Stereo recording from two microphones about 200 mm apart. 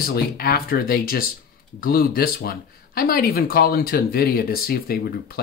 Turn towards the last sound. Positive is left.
turn(degrees=50)  # may be behind; listen again after turning